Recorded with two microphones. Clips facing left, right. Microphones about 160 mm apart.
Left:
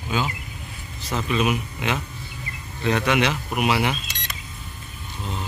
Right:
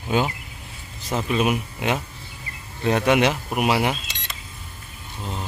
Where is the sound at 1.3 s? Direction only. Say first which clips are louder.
Right 1 dB; 45° right (ahead or behind).